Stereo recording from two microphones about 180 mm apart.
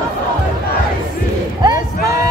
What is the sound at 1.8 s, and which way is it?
Vehicle, 55° left (ahead or behind).